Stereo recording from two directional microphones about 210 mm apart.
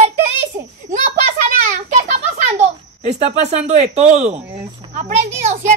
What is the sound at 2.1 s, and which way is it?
A woman's voice, 30° right (ahead or behind).